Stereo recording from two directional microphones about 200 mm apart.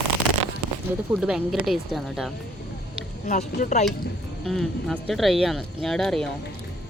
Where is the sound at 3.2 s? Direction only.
40° left (ahead or behind).